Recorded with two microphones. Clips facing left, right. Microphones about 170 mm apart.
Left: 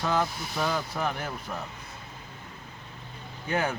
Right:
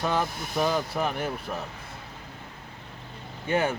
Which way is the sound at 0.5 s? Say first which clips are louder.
Right 5 dB; 20° right (ahead or behind).